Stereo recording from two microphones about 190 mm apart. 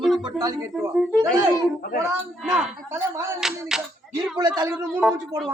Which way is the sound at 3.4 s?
Centre (ahead or behind).